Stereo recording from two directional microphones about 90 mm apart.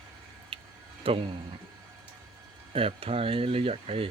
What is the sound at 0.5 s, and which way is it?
Tick-tock, 75° right (ahead or behind).